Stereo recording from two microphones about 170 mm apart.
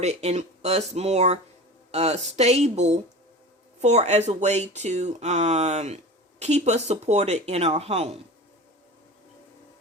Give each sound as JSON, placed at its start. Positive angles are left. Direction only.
{"t": 0.0, "sound": "speech", "side_deg": -40}